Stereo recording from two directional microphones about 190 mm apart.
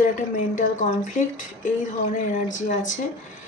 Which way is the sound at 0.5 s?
40° left (ahead or behind).